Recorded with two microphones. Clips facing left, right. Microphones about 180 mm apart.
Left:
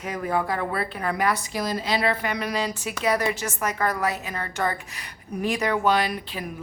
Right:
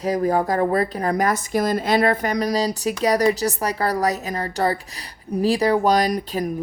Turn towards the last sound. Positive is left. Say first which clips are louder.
# right 8 dB
turn(degrees=-40)  # may be behind; listen again after turning